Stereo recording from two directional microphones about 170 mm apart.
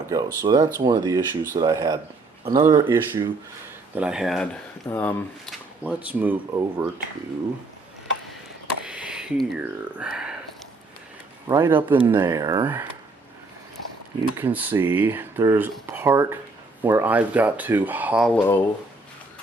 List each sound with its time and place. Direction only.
0.1 s speech: 20° right (ahead or behind)
3.9 s speech: 5° right (ahead or behind)
4.9 s speech: 10° left (ahead or behind)
5.5 s a sound: 5° right (ahead or behind)
6.1 s speech: 10° right (ahead or behind)
8.8 s speech: 5° right (ahead or behind)
11.4 s speech: 15° right (ahead or behind)
14.3 s speech: 10° right (ahead or behind)
18.3 s speech: 10° left (ahead or behind)